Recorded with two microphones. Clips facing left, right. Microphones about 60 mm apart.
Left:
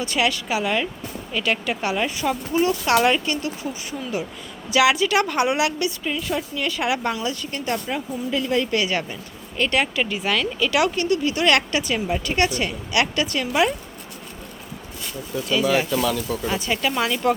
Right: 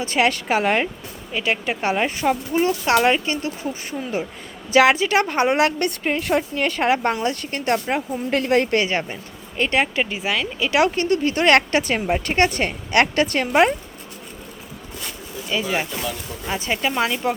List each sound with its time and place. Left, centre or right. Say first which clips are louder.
0.0 s a woman's voice: right 3 dB; right
1.3 s a woman's voice: right 1 dB; right
16.0 s speech: left 6 dB; left
16.5 s speech: right 3 dB; right